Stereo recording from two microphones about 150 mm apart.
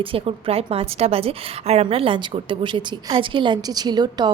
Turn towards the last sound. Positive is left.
turn(degrees=-30)  # may be behind; listen again after turning